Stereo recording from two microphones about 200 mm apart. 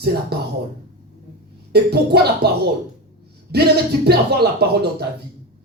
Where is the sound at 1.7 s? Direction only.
55° right (ahead or behind).